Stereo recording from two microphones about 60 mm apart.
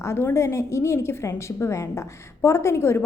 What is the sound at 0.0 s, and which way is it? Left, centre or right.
A woman's voice, left.